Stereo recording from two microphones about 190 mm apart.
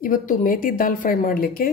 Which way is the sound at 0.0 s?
45° left (ahead or behind).